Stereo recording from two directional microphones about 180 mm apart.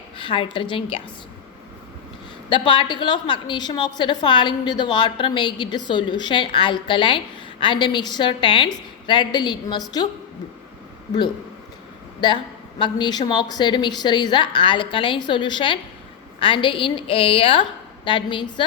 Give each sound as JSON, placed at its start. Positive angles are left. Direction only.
{"t": 0.2, "sound": "a woman's voice", "side_deg": 25}
{"t": 2.5, "sound": "a woman's voice", "side_deg": 25}
{"t": 12.2, "sound": "a woman's voice", "side_deg": 25}